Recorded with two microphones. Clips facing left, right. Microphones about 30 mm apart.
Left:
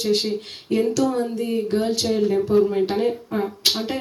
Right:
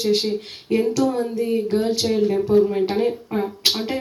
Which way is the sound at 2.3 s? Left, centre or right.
Centre.